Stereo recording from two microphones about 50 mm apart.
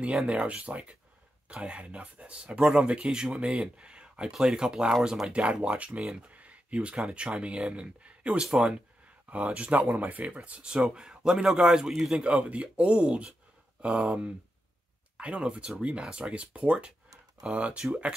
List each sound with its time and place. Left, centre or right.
0.3 s speech: right; by 5.3 s centre
5.3 s speech: right
6.3 s a sound: right
7.1 s speech: centre
15.1 s speech: right